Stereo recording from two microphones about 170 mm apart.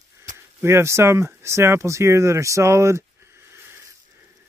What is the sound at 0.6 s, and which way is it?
Speech, 15° right (ahead or behind).